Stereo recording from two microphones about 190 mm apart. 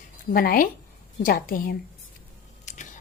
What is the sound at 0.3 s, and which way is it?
A woman's voice, 50° left (ahead or behind).